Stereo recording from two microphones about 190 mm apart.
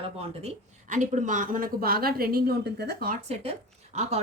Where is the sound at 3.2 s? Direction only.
30° right (ahead or behind).